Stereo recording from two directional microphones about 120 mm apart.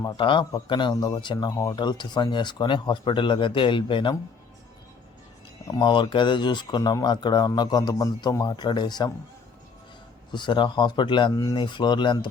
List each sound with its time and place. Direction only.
0.0 s a man's voice: 40° left (ahead or behind)
5.6 s speech: 30° left (ahead or behind)
5.9 s speech: 45° left (ahead or behind)
10.3 s speech: 40° left (ahead or behind)